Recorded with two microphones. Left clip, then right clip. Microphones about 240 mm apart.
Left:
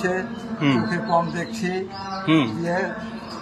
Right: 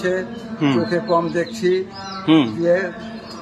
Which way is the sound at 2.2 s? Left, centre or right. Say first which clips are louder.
Right 5 dB; centre.